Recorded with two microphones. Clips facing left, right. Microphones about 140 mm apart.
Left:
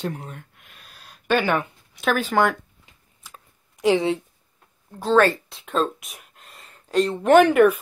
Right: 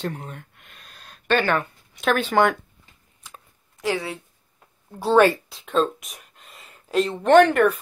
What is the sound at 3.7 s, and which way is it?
Speech, 20° left (ahead or behind).